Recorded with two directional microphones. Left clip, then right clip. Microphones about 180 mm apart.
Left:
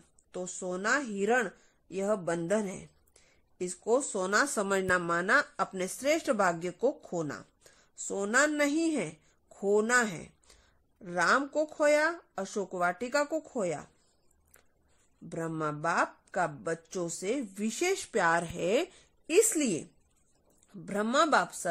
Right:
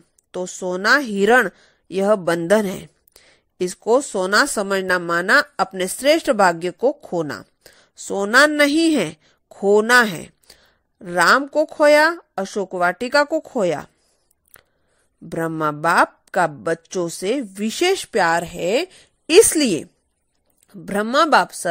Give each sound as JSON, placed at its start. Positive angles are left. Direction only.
{"t": 0.3, "sound": "a woman's voice", "side_deg": -40}
{"t": 15.2, "sound": "a woman's voice", "side_deg": -45}
{"t": 19.2, "sound": "speech", "side_deg": -45}